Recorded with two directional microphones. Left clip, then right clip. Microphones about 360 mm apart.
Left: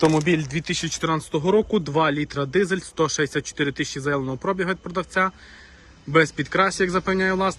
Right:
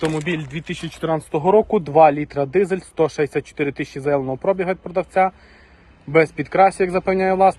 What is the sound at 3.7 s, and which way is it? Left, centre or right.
Speech, centre.